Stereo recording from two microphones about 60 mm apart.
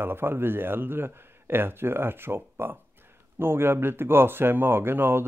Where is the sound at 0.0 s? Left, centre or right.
Right.